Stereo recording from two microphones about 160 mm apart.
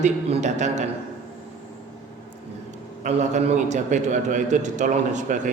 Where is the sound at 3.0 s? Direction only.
45° right (ahead or behind).